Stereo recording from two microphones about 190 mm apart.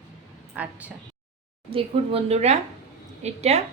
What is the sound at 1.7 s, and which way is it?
A woman's voice, 30° right (ahead or behind).